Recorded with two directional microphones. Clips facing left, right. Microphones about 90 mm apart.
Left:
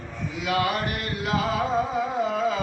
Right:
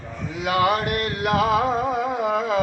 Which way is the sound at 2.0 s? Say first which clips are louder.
Right 2 dB; 60° right (ahead or behind).